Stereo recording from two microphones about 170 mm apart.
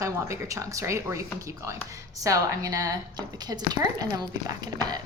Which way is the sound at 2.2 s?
20° right (ahead or behind).